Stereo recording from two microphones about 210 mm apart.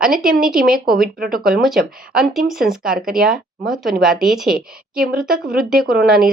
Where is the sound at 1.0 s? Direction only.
45° right (ahead or behind).